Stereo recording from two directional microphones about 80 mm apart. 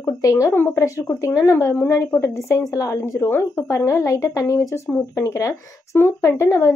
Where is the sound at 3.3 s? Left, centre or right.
Left.